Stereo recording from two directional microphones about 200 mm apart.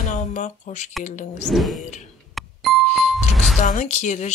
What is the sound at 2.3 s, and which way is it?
Music, centre (ahead or behind).